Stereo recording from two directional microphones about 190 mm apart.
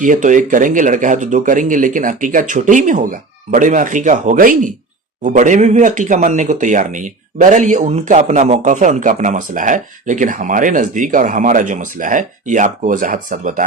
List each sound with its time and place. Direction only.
0.0 s speech: 40° right (ahead or behind)